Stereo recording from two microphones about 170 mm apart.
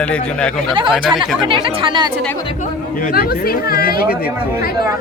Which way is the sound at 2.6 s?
55° left (ahead or behind).